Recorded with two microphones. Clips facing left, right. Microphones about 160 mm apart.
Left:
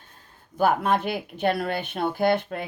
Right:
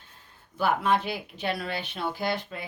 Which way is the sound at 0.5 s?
50° left (ahead or behind).